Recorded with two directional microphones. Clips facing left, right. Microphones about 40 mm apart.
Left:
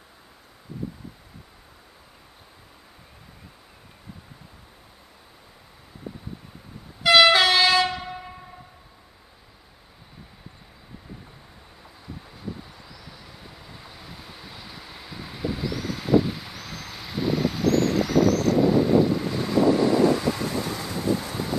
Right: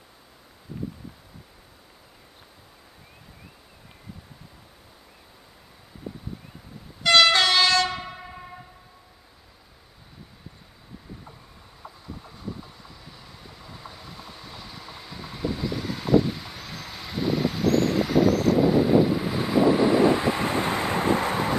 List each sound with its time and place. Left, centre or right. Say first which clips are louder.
7.0 s train: left 2 dB; centre
12.2 s vehicle: left 1 dB; centre; by 21.5 s right